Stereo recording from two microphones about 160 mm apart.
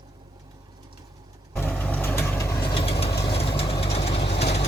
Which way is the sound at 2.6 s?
30° left (ahead or behind).